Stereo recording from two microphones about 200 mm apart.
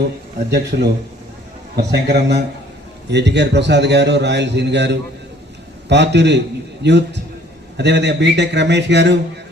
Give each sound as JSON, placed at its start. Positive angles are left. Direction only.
{"t": 0.7, "sound": "a man's voice", "side_deg": -45}
{"t": 1.7, "sound": "a man's voice", "side_deg": -55}